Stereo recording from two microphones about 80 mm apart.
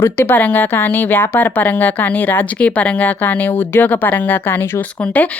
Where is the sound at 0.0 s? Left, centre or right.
Left.